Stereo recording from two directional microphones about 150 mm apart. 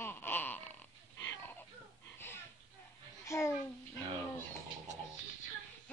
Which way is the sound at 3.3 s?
20° left (ahead or behind).